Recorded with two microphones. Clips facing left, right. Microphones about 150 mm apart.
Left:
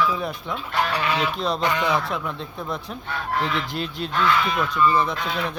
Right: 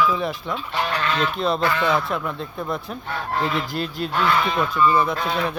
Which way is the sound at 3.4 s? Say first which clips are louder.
Right 2 dB; 40° right (ahead or behind).